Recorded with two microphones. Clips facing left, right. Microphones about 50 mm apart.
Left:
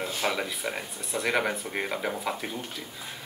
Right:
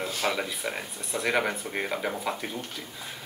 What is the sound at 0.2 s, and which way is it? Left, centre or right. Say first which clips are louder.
Speech: even; centre.